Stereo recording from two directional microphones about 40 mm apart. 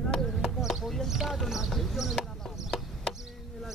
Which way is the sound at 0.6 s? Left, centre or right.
Centre.